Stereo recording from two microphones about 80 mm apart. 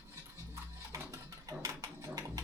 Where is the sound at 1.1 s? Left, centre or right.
Right.